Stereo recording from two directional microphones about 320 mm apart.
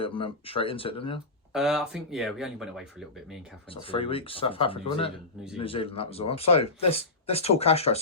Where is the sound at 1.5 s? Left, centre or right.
Centre.